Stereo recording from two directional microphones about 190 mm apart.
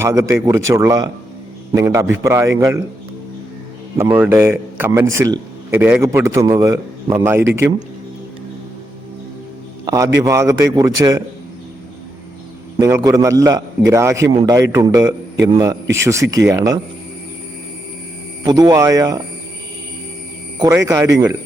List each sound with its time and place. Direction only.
0.0 s a man's voice: 15° right (ahead or behind)
3.9 s a man's voice: 15° right (ahead or behind)
9.8 s a sound: 20° right (ahead or behind)
10.2 s a man's voice: 15° right (ahead or behind)
12.8 s a man's voice: 20° right (ahead or behind)
18.4 s speech: 20° right (ahead or behind)
20.6 s a man's voice: 15° right (ahead or behind)